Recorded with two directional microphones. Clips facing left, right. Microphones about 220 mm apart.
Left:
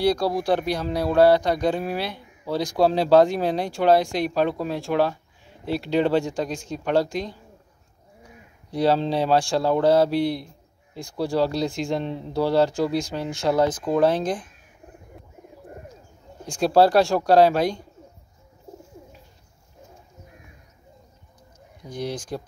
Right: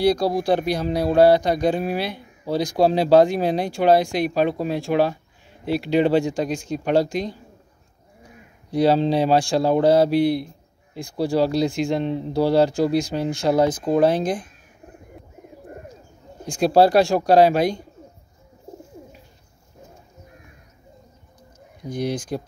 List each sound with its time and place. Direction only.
0.0 s speech: 15° right (ahead or behind)
8.7 s speech: 15° right (ahead or behind)
16.4 s speech: 15° right (ahead or behind)
21.8 s speech: 15° right (ahead or behind)